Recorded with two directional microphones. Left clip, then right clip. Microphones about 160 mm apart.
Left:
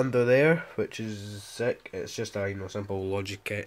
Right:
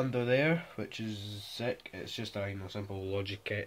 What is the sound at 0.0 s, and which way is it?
Speech, 55° left (ahead or behind).